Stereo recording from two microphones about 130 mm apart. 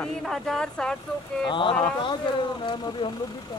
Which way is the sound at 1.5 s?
40° left (ahead or behind).